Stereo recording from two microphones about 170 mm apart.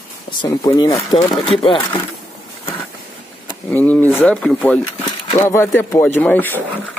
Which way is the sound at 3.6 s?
10° left (ahead or behind).